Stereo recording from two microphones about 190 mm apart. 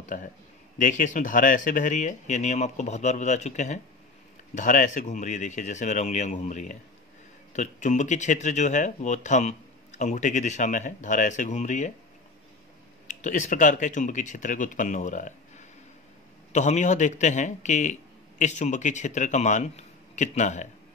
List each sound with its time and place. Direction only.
0.0 s speech: 45° left (ahead or behind)
13.1 s speech: 40° left (ahead or behind)